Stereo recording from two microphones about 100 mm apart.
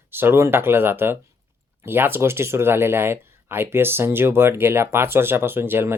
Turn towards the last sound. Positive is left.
turn(degrees=-20)  # may be behind; listen again after turning